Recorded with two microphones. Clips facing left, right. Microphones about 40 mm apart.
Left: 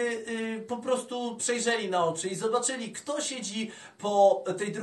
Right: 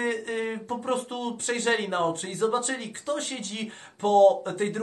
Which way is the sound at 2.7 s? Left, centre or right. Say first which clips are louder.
Right 3 dB; right.